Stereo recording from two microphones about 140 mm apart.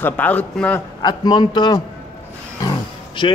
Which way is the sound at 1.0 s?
30° left (ahead or behind).